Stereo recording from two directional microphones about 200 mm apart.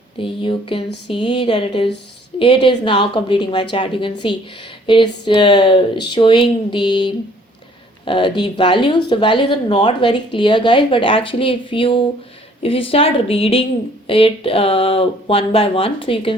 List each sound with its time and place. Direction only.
0.2 s speech: 25° left (ahead or behind)